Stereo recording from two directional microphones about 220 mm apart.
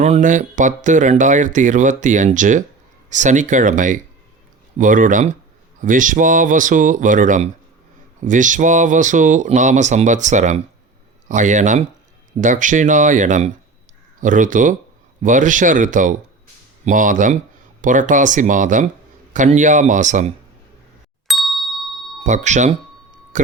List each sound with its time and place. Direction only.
0.0 s speech: 35° right (ahead or behind)
21.2 s ding: centre (ahead or behind)
22.2 s speech: 35° right (ahead or behind)